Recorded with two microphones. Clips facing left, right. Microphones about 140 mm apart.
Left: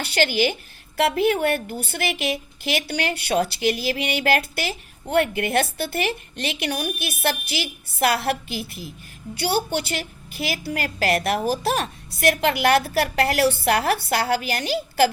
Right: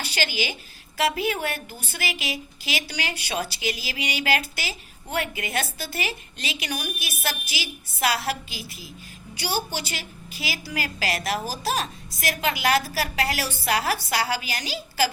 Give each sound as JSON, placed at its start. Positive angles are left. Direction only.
{"t": 0.0, "sound": "a woman's voice", "side_deg": 60}